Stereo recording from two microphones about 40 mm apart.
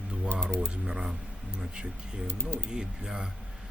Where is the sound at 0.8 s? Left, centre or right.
Centre.